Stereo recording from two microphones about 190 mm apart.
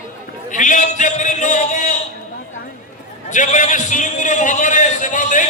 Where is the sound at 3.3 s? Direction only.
40° left (ahead or behind).